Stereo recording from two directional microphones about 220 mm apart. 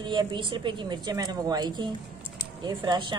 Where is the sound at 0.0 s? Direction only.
20° right (ahead or behind).